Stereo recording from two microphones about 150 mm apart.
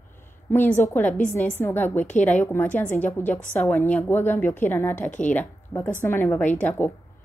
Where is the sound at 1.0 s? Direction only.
55° left (ahead or behind).